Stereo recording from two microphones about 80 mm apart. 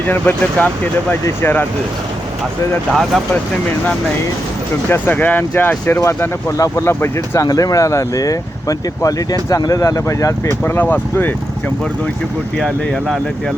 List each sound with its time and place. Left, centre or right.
0.0 s speech: left
2.9 s speech: centre
4.9 s speech: left
7.4 s speech: left
10.7 s speech: left
12.5 s speech: centre